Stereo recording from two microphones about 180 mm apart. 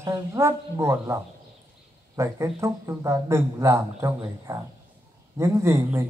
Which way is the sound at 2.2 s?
15° right (ahead or behind).